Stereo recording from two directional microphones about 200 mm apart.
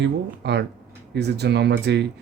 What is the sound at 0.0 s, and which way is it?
Speech, 60° right (ahead or behind).